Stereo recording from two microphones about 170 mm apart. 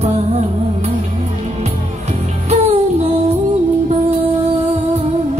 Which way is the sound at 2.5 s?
40° right (ahead or behind).